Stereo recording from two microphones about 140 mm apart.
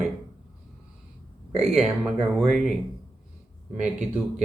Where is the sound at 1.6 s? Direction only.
5° right (ahead or behind).